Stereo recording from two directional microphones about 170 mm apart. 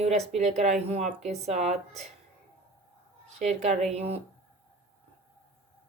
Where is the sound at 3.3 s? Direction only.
40° right (ahead or behind).